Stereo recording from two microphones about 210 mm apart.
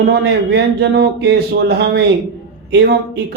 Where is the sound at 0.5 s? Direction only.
55° right (ahead or behind).